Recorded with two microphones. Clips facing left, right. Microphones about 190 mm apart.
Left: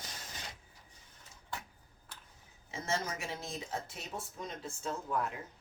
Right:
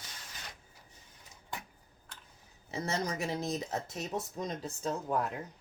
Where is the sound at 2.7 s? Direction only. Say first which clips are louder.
Right 3 dB; 35° right (ahead or behind).